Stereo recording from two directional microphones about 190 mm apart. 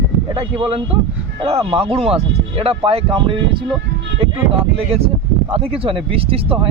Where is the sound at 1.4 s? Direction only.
30° right (ahead or behind).